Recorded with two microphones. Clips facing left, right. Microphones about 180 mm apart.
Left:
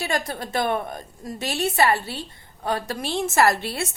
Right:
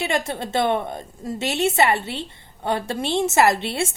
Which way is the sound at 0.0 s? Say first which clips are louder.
Right 3 dB; 25° right (ahead or behind).